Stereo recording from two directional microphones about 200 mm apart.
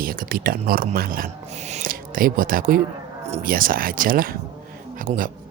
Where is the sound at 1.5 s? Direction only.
35° right (ahead or behind).